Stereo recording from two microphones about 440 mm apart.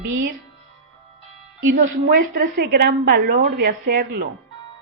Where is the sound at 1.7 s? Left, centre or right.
Centre.